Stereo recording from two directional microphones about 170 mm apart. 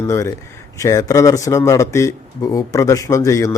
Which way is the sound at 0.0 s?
20° left (ahead or behind).